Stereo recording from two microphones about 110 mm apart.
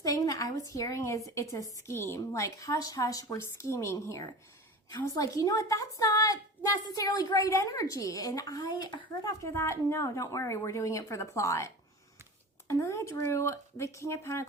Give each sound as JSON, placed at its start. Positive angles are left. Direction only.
{"t": 0.0, "sound": "a sound", "side_deg": 30}
{"t": 1.9, "sound": "a woman's voice", "side_deg": 25}
{"t": 9.4, "sound": "a woman's voice", "side_deg": 25}